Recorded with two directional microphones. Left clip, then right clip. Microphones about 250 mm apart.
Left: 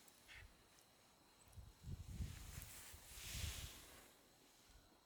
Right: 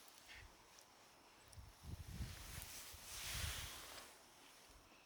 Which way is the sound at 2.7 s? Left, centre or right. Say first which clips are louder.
Right 5 dB; centre.